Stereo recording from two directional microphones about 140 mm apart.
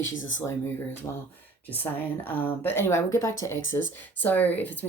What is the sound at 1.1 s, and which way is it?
Speech, 20° left (ahead or behind).